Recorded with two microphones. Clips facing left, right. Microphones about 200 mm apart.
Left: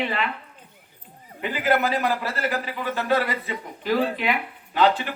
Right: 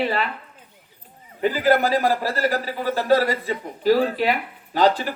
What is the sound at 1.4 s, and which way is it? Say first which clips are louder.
A man's voice: right 4 dB; 40° right (ahead or behind).